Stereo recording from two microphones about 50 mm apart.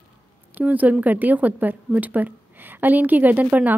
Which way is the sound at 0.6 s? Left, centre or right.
Right.